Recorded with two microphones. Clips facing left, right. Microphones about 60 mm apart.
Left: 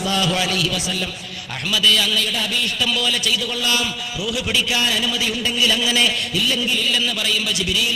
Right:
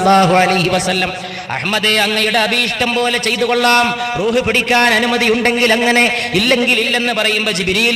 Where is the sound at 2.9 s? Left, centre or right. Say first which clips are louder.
Right 6 dB; right.